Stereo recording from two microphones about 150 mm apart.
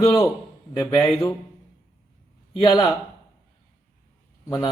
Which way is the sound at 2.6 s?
30° left (ahead or behind).